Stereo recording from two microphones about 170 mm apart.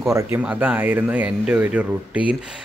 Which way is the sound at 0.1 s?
10° right (ahead or behind).